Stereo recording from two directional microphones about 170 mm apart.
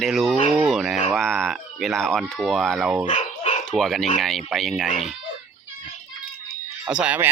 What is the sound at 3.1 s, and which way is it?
Dog, 45° left (ahead or behind).